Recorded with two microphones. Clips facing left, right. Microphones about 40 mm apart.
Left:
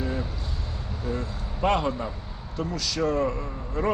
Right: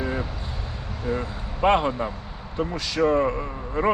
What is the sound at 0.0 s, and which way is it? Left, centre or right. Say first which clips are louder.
Vehicle: right 2 dB; right.